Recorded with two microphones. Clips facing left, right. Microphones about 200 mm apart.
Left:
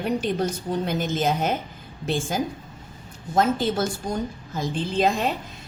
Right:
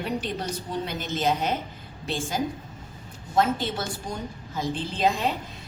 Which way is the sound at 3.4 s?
45° left (ahead or behind).